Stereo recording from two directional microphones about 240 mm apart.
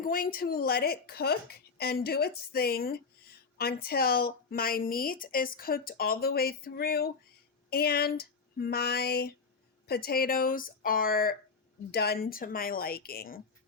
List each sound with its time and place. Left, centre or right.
0.0 s a woman's voice: left